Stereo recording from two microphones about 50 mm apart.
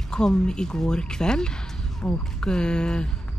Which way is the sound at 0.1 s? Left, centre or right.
Centre.